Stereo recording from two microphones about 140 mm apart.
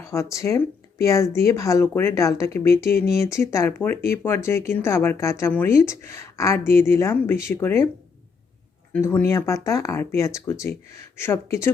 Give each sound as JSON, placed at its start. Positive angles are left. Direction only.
{"t": 0.0, "sound": "speech", "side_deg": 20}
{"t": 8.9, "sound": "speech", "side_deg": 15}